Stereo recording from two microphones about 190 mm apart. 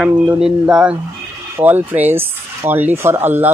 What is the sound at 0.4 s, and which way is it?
Speech, 5° right (ahead or behind).